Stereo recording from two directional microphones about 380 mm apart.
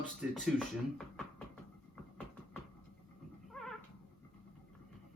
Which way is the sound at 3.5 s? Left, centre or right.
Centre.